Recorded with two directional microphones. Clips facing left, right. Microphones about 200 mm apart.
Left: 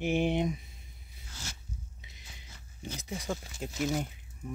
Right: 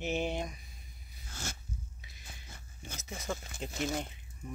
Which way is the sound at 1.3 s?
50° right (ahead or behind).